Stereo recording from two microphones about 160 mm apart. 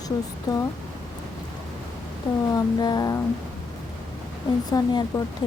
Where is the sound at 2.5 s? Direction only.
25° left (ahead or behind).